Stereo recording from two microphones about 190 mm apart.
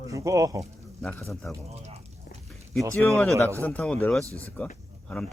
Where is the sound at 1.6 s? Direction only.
35° right (ahead or behind).